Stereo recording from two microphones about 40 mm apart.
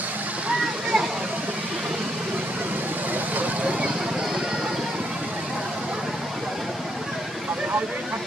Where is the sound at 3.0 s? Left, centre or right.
Right.